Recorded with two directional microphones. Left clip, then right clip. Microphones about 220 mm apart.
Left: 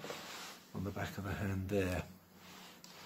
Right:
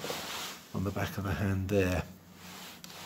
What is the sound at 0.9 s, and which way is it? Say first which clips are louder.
Speech: right 7 dB; 25° right (ahead or behind).